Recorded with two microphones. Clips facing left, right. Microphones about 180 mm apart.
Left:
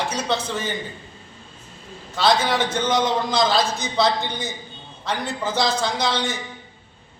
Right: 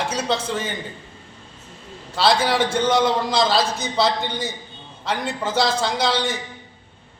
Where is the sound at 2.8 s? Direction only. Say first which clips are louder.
Right 2 dB; 30° right (ahead or behind).